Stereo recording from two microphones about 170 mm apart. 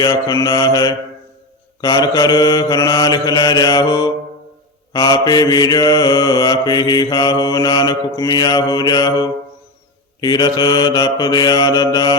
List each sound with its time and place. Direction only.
0.0 s mantra: 20° left (ahead or behind)